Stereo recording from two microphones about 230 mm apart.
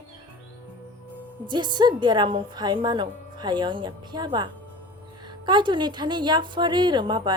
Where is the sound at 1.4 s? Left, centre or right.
Centre.